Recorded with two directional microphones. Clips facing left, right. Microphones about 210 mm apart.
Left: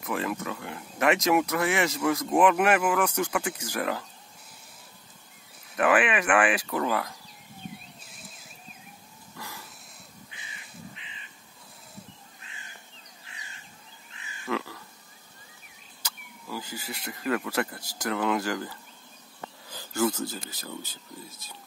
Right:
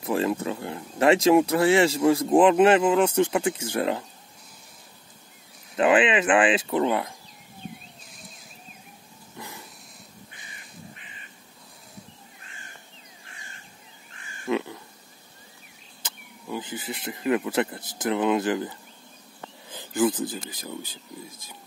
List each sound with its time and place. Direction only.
0.0 s speech: 30° right (ahead or behind)
5.8 s speech: 20° right (ahead or behind)
9.4 s a sound: 20° right (ahead or behind)
14.1 s crow: 45° right (ahead or behind)
14.5 s crow: 20° right (ahead or behind)
16.0 s speech: 20° right (ahead or behind)